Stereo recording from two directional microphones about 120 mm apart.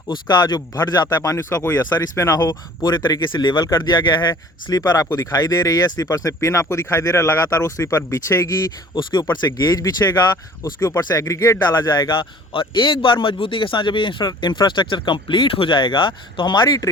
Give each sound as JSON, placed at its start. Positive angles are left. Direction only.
{"t": 0.1, "sound": "a man's voice", "side_deg": 35}
{"t": 1.9, "sound": "a man's voice", "side_deg": 30}
{"t": 11.8, "sound": "a man's voice", "side_deg": 35}